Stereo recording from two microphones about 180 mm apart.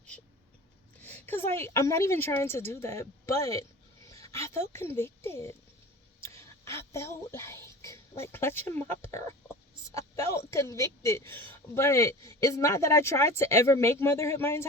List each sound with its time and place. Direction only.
1.3 s a child's voice: 10° left (ahead or behind)
6.1 s a sound: 15° left (ahead or behind)
9.9 s speech: 15° left (ahead or behind)